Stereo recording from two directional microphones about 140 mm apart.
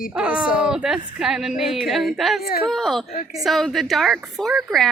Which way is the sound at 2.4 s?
90° left.